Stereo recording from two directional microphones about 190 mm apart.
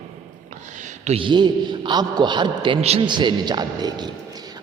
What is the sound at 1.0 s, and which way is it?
A man's voice, 30° right (ahead or behind).